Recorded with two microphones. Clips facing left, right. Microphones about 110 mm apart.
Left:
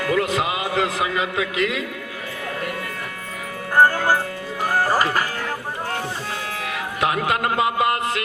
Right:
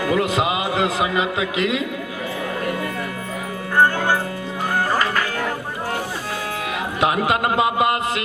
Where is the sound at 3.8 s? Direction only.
40° left (ahead or behind).